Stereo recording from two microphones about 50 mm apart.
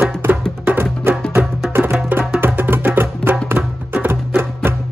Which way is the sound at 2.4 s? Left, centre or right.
Right.